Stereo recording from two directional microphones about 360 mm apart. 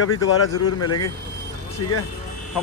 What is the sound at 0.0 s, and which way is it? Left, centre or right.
A man's voice, left.